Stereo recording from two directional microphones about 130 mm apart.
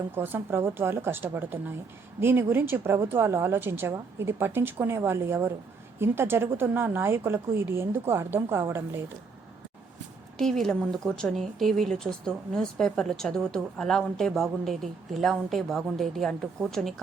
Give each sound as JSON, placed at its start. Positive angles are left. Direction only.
{"t": 0.1, "sound": "a woman's voice", "side_deg": -15}
{"t": 10.3, "sound": "speech", "side_deg": 5}